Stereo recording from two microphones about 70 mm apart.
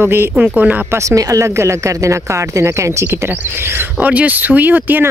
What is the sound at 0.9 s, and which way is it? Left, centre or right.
Speech, right.